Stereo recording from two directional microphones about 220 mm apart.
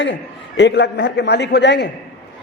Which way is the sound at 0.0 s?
55° left (ahead or behind).